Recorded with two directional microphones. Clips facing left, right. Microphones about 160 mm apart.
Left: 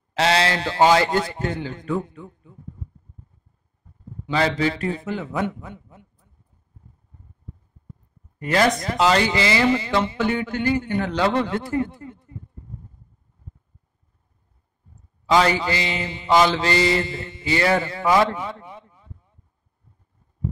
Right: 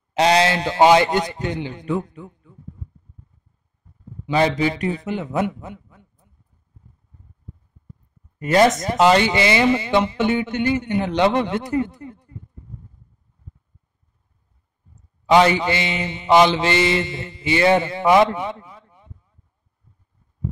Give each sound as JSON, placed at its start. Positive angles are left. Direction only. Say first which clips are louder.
{"t": 0.1, "sound": "mantra", "louder": "right 4 dB", "side_deg": -20}
{"t": 4.3, "sound": "mantra", "louder": "right 3 dB", "side_deg": -20}
{"t": 8.4, "sound": "mantra", "louder": "right 4 dB", "side_deg": -25}
{"t": 15.4, "sound": "mantra", "louder": "right 3 dB", "side_deg": -20}
{"t": 18.6, "sound": "speech", "louder": "left 3 dB", "side_deg": 25}